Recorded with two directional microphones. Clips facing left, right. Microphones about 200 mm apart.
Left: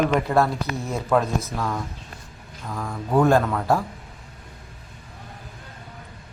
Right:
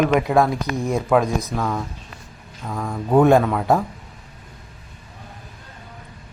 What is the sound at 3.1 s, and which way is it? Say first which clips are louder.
Speech: right 4 dB; 20° right (ahead or behind).